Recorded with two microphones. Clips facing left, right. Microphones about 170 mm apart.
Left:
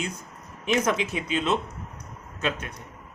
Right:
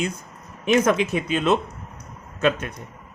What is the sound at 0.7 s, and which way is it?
Speech, 55° right (ahead or behind).